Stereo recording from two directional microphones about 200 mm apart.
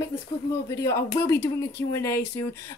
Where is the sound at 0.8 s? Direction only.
15° left (ahead or behind).